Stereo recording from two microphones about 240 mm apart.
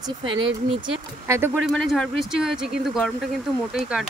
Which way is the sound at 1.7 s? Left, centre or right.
Centre.